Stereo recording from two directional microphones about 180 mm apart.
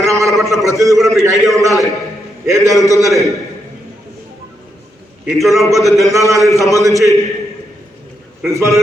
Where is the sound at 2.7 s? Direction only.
20° left (ahead or behind).